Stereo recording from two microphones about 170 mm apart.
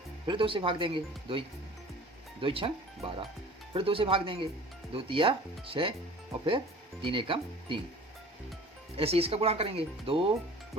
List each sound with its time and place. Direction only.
0.3 s speech: 30° right (ahead or behind)
7.0 s speech: 30° right (ahead or behind)
9.0 s speech: 35° right (ahead or behind)